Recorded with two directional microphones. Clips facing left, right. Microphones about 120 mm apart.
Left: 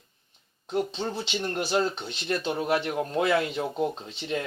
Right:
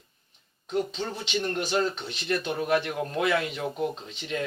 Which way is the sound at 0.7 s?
30° left (ahead or behind).